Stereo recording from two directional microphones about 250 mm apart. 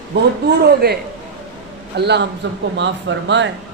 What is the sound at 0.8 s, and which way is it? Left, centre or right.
A man's voice, right.